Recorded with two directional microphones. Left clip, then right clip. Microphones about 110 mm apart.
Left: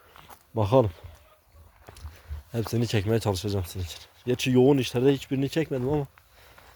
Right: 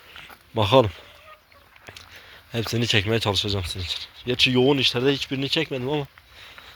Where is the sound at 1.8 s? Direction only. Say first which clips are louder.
Right 8 dB; 35° left (ahead or behind).